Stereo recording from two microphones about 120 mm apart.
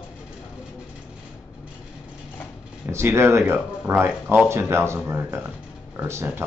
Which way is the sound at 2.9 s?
20° right (ahead or behind).